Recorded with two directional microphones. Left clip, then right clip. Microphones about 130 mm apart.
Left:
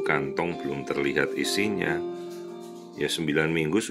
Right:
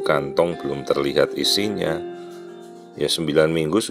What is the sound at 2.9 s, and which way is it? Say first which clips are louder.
Speech: right 7 dB; 30° right (ahead or behind).